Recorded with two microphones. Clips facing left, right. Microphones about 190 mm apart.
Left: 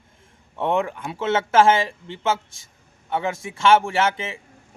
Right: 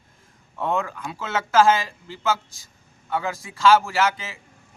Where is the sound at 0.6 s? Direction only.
25° left (ahead or behind).